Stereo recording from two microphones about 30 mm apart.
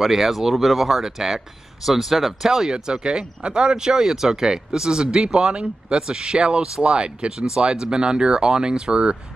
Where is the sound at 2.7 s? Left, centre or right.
Right.